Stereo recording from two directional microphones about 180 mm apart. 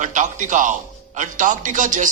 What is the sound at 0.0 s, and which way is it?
A man's voice, 45° right (ahead or behind).